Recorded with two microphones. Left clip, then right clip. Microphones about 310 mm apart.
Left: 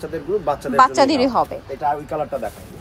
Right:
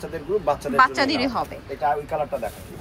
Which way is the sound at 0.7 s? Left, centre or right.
Centre.